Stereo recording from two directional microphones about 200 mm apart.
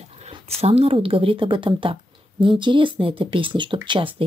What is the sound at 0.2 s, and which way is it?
Speech, 30° right (ahead or behind).